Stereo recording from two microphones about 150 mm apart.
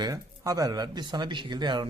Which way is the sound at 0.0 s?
25° right (ahead or behind).